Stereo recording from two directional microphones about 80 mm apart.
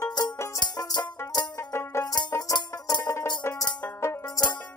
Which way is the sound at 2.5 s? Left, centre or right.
Left.